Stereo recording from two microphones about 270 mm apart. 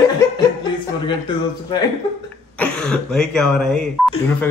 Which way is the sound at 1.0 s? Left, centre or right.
Centre.